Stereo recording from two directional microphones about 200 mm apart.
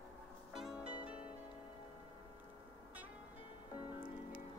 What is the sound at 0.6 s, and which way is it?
Music, 5° right (ahead or behind).